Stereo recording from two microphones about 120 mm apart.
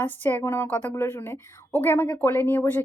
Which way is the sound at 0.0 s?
15° left (ahead or behind).